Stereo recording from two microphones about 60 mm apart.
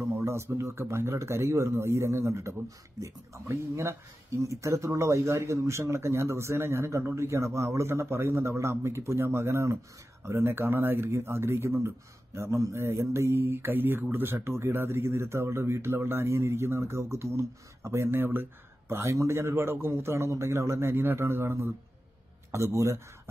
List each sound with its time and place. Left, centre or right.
0.2 s speech: right
11.1 s speech: right
13.7 s speech: right
18.2 s speech: right
18.9 s speech: right
22.5 s speech: right